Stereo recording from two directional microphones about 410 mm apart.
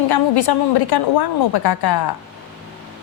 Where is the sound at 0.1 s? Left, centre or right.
Left.